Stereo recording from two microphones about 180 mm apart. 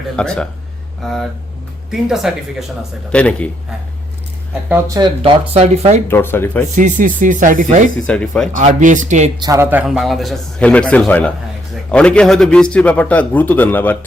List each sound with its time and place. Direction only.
0.2 s a man's voice: 5° left (ahead or behind)
4.7 s speech: 20° right (ahead or behind); by 6.0 s 35° right (ahead or behind)
6.1 s a man's voice: 10° left (ahead or behind)
6.7 s speech: 45° right (ahead or behind)
8.0 s a man's voice: 5° left (ahead or behind)
8.5 s speech: 45° right (ahead or behind)
9.4 s a man's voice: 15° right (ahead or behind); by 14.0 s 10° left (ahead or behind)